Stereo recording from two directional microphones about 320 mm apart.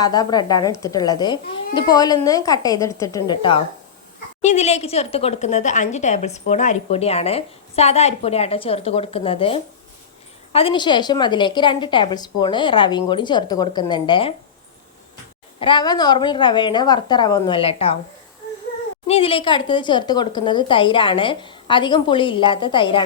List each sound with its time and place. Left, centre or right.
0.0 s a woman's voice: centre
15.5 s a woman's voice: centre
19.0 s a woman's voice: centre